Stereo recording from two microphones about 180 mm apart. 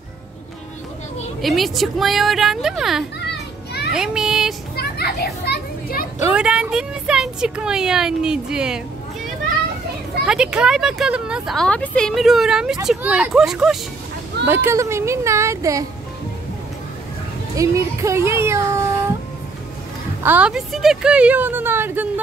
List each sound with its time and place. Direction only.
1.4 s a woman's voice: centre (ahead or behind)
4.7 s a child's voice: 60° left (ahead or behind)
6.2 s a woman's voice: 5° right (ahead or behind)
10.2 s a woman's voice: 5° right (ahead or behind)
14.5 s speech: 15° right (ahead or behind)
17.6 s speech: 15° right (ahead or behind)
20.2 s speech: 5° right (ahead or behind)